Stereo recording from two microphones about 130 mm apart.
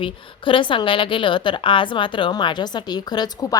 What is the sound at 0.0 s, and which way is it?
A woman's voice, 40° left (ahead or behind).